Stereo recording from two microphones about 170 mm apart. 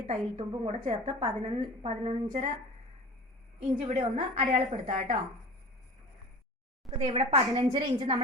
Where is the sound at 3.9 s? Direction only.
40° right (ahead or behind).